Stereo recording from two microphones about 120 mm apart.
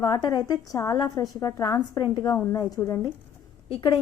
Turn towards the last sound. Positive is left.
turn(degrees=40)  # may be behind; listen again after turning